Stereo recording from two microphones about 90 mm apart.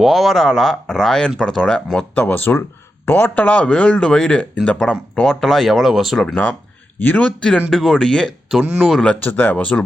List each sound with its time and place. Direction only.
0.0 s speech: centre (ahead or behind)
6.2 s speech: 20° left (ahead or behind)
8.6 s speech: 15° right (ahead or behind)
8.9 s speech: 5° left (ahead or behind)
9.2 s speech: 20° left (ahead or behind)